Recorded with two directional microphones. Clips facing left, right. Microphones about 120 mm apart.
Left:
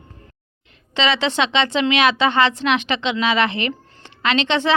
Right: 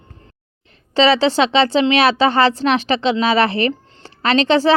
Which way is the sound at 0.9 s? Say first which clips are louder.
Right 6 dB; 35° right (ahead or behind).